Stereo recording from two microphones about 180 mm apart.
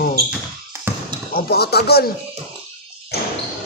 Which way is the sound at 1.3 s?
60° left (ahead or behind).